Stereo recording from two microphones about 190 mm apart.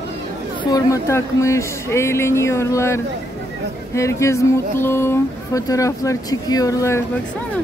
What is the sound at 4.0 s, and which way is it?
Speech, 15° left (ahead or behind).